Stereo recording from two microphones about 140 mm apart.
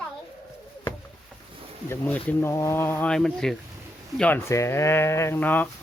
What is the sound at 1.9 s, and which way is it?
Speech, 10° left (ahead or behind).